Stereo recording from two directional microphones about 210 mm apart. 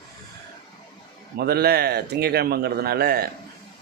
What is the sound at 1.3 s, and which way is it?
Speech, 50° right (ahead or behind).